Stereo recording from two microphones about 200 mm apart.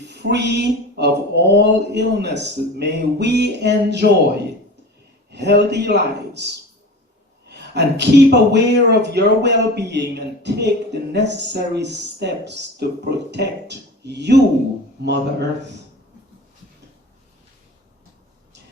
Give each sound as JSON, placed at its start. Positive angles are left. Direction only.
{"t": 0.1, "sound": "a man's voice", "side_deg": -60}
{"t": 5.3, "sound": "a man's voice", "side_deg": -55}